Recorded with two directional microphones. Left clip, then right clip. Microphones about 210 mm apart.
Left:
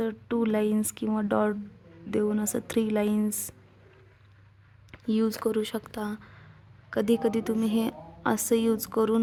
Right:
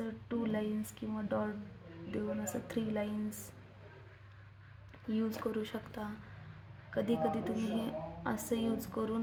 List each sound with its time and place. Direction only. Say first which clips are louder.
0.0 s speech: left 11 dB; 50° left (ahead or behind)
4.9 s a woman's voice: left 10 dB; 55° left (ahead or behind)